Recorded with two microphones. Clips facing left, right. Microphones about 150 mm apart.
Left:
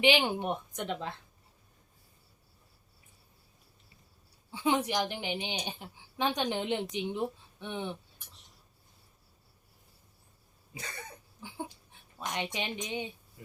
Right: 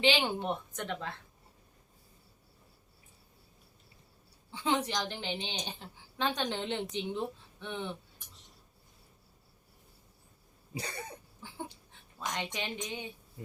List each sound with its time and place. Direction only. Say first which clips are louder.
0.0 s speech: left 2 dB; 15° left (ahead or behind)
4.5 s speech: left 3 dB; 10° left (ahead or behind)
11.4 s dog: left 2 dB; 15° left (ahead or behind)
12.5 s speech: left 3 dB; 20° left (ahead or behind)